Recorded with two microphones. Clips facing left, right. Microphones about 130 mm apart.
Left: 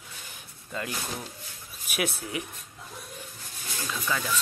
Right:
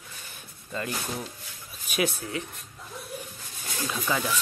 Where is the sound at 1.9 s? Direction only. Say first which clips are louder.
Right 3 dB; 10° left (ahead or behind).